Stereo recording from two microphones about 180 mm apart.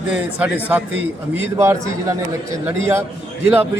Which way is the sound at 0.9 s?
90° right.